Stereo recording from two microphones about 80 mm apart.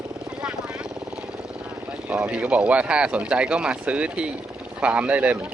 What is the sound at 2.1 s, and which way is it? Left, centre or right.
Speech, centre.